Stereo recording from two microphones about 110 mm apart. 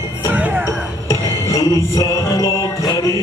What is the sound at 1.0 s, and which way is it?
Music, 30° left (ahead or behind).